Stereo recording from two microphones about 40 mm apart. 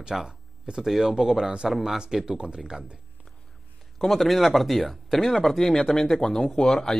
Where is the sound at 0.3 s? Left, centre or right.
Right.